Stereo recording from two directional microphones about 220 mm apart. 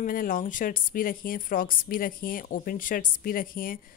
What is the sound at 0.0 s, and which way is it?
A woman's voice, 40° left (ahead or behind).